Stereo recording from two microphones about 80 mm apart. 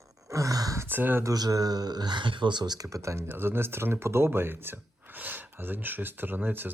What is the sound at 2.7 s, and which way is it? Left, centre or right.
Speech, right.